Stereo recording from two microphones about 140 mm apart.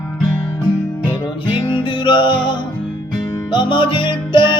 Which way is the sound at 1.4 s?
35° left (ahead or behind).